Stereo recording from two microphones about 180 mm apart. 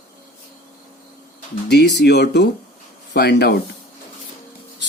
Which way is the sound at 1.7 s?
65° left (ahead or behind).